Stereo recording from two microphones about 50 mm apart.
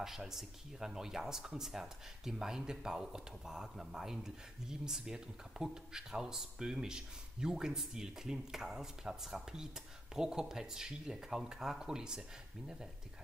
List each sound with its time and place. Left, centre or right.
0.0 s speech: centre